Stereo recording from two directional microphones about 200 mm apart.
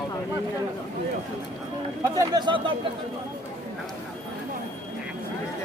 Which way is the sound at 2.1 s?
20° right (ahead or behind).